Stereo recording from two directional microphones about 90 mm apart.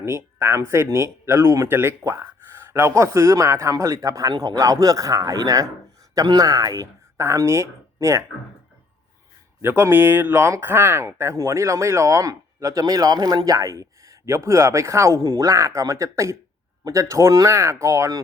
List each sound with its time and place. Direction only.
0.0 s speech: 30° right (ahead or behind)
9.6 s speech: 25° right (ahead or behind)